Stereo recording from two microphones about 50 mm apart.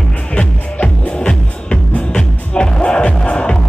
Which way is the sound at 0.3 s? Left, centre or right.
Left.